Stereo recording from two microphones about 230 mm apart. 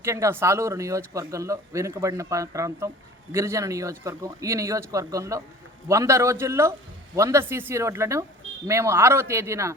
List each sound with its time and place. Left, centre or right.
0.0 s a man's voice: centre